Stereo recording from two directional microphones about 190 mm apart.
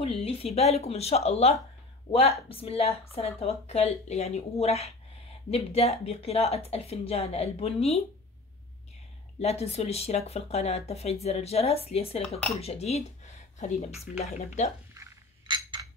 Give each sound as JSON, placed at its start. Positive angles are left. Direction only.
{"t": 0.0, "sound": "speech", "side_deg": 30}
{"t": 9.4, "sound": "speech", "side_deg": 35}
{"t": 15.0, "sound": "chink", "side_deg": -20}